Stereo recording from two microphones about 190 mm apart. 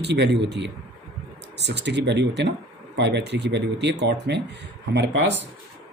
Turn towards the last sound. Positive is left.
turn(degrees=-65)  # may be behind; listen again after turning